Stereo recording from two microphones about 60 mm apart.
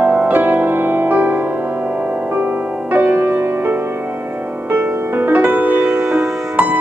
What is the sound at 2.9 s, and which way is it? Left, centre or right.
Music, right.